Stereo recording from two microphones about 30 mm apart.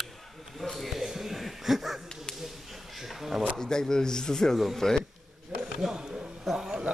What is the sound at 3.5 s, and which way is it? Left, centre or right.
Speech, left.